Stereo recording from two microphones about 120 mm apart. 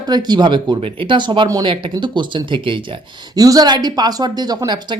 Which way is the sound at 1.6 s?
45° right (ahead or behind).